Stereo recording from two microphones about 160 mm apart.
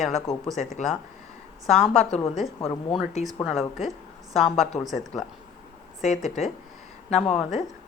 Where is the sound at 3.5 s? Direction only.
Centre (ahead or behind).